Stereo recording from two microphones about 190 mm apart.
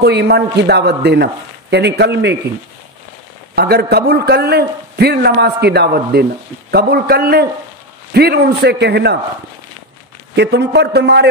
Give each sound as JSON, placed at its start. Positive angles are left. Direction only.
{"t": 0.0, "sound": "a man's voice", "side_deg": -60}
{"t": 3.5, "sound": "a man's voice", "side_deg": -55}
{"t": 10.3, "sound": "a man's voice", "side_deg": -60}